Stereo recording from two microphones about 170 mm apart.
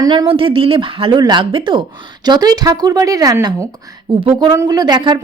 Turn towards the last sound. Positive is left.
turn(degrees=-25)  # may be behind; listen again after turning